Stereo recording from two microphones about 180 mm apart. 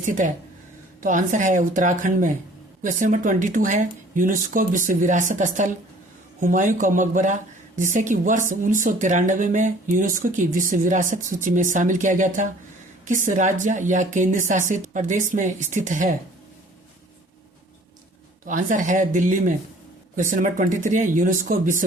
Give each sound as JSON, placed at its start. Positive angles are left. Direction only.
{"t": 0.0, "sound": "speech", "side_deg": -45}
{"t": 18.4, "sound": "speech", "side_deg": -45}